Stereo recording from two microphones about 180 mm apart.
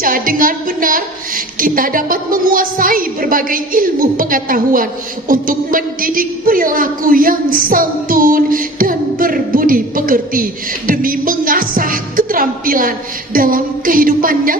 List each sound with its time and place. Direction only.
0.0 s a woman's voice: 50° right (ahead or behind)